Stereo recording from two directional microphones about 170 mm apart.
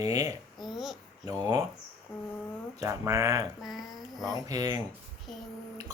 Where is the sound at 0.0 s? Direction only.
20° right (ahead or behind).